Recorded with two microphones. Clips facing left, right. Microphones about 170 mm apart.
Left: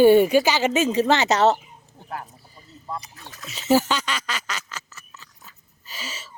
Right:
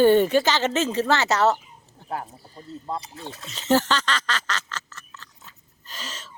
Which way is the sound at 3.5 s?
10° left (ahead or behind).